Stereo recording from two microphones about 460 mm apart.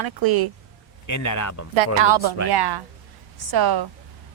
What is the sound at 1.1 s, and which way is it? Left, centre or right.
Speech, left.